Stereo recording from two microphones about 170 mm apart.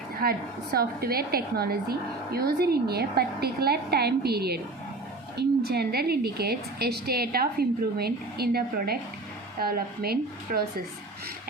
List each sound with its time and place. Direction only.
0.2 s a woman's voice: 60° right (ahead or behind)